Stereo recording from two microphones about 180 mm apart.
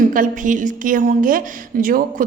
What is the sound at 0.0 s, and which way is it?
A woman's voice, 50° right (ahead or behind).